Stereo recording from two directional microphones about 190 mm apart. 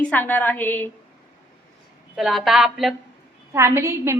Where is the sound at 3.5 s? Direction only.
15° right (ahead or behind).